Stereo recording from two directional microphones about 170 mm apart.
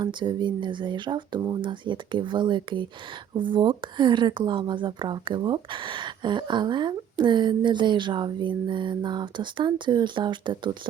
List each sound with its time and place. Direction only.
0.0 s speech: 25° right (ahead or behind)